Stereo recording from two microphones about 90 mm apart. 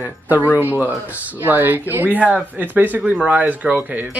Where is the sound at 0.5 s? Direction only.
20° right (ahead or behind).